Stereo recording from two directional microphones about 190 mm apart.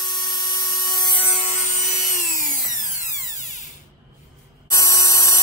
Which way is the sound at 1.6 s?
40° left (ahead or behind).